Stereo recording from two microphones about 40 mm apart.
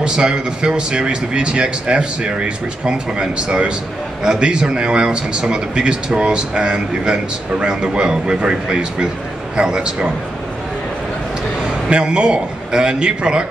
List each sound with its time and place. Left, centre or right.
0.0 s a man's voice: right
11.9 s a man's voice: right